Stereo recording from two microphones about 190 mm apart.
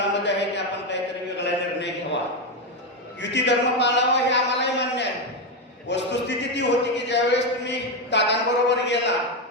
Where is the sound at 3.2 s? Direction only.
65° left (ahead or behind).